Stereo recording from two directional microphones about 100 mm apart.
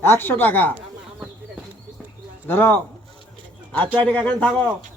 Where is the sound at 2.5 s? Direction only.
20° left (ahead or behind).